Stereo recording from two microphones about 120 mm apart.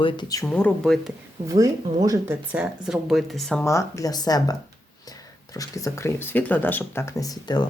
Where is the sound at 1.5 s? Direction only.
30° right (ahead or behind).